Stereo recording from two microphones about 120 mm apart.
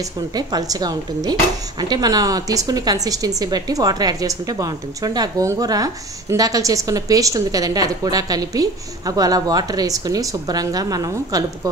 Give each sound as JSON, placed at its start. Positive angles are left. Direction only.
{"t": 0.4, "sound": "a woman's voice", "side_deg": -35}